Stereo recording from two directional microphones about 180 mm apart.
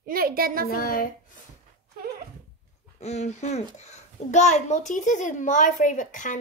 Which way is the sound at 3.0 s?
40° left (ahead or behind).